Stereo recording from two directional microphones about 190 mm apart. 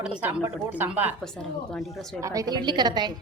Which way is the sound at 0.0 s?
5° right (ahead or behind).